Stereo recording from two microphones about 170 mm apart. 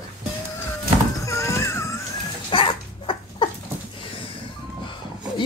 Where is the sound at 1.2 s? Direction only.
15° left (ahead or behind).